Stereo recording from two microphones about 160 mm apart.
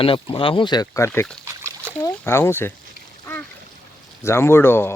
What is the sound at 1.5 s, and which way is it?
Splash, 15° right (ahead or behind).